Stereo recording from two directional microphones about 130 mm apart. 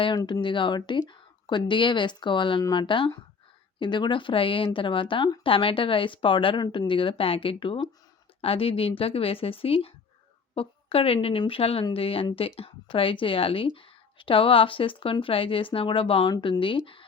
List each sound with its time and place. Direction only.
0.2 s speech: 25° left (ahead or behind)
0.4 s speech: 40° left (ahead or behind)